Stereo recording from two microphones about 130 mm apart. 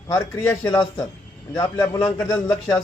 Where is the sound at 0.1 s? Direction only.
25° left (ahead or behind).